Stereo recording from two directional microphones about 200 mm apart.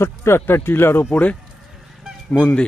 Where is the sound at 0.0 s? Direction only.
10° left (ahead or behind).